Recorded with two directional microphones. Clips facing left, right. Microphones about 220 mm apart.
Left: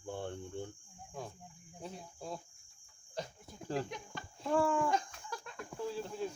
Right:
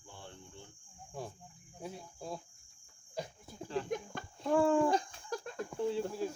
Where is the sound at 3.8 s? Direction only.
50° right (ahead or behind).